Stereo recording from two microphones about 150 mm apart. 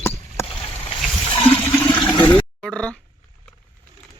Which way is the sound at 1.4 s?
15° left (ahead or behind).